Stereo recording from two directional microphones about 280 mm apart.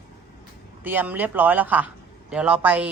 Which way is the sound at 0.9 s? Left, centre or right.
Centre.